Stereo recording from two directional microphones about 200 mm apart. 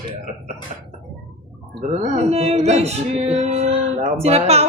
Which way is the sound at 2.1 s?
30° right (ahead or behind).